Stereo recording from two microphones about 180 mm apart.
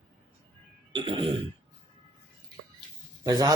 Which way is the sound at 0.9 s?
25° right (ahead or behind).